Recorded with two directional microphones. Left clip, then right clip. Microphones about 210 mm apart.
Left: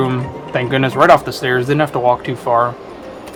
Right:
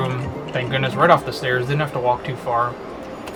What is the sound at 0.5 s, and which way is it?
Speech, 30° left (ahead or behind).